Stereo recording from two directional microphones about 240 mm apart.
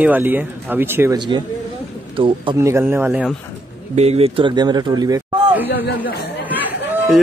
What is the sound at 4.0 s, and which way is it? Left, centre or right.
A man's voice, right.